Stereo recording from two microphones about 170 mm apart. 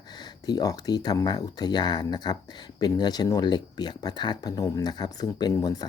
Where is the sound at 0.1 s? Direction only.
25° left (ahead or behind).